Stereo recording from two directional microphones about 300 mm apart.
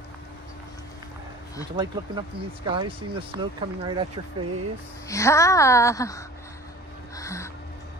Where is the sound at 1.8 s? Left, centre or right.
Centre.